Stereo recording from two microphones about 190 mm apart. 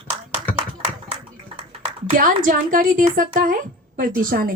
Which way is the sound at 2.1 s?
45° right (ahead or behind).